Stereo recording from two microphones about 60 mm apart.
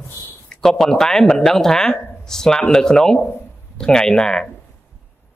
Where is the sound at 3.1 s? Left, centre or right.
Left.